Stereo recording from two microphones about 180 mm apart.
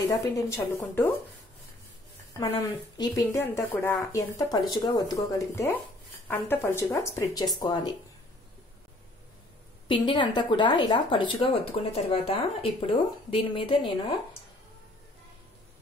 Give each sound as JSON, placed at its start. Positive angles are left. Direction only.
{"t": 0.1, "sound": "a woman's voice", "side_deg": 15}
{"t": 2.3, "sound": "a woman's voice", "side_deg": 20}
{"t": 9.8, "sound": "speech", "side_deg": 25}